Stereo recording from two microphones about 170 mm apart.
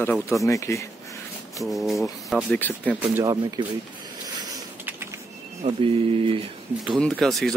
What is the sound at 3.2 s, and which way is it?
Speech, 20° right (ahead or behind).